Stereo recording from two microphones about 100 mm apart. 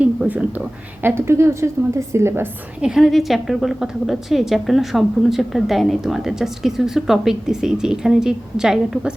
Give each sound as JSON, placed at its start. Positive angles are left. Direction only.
{"t": 0.0, "sound": "a sound", "side_deg": -10}
{"t": 1.0, "sound": "a woman's voice", "side_deg": -25}
{"t": 2.8, "sound": "a woman's voice", "side_deg": -5}